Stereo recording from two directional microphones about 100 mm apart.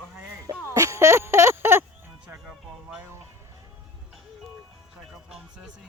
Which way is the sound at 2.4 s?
5° right (ahead or behind).